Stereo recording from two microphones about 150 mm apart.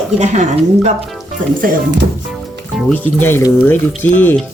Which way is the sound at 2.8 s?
5° left (ahead or behind).